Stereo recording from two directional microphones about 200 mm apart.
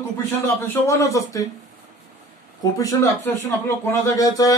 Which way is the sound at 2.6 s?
15° left (ahead or behind).